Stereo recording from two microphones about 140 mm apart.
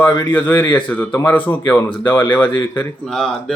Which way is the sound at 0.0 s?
15° left (ahead or behind).